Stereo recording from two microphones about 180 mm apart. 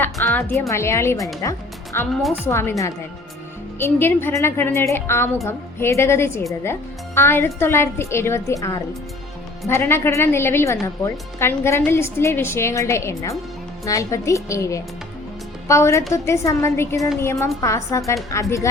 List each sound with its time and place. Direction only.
0.0 s a woman's voice: 10° left (ahead or behind)